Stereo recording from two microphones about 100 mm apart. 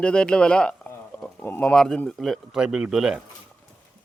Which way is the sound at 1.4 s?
20° left (ahead or behind).